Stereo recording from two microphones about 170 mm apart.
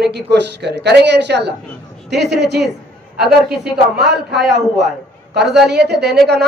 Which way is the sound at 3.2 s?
5° right (ahead or behind).